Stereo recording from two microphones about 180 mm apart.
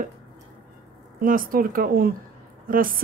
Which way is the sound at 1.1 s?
50° right (ahead or behind).